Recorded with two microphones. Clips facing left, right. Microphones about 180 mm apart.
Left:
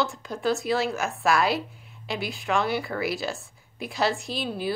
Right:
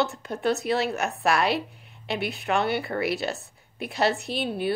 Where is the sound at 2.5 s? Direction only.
60° right (ahead or behind).